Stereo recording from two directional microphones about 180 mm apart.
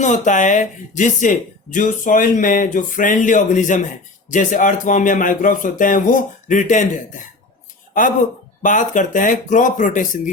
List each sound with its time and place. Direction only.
0.0 s speech: 45° left (ahead or behind)
8.6 s speech: 45° left (ahead or behind)